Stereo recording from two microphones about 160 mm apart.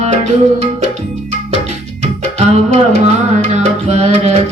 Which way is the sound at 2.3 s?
40° right (ahead or behind).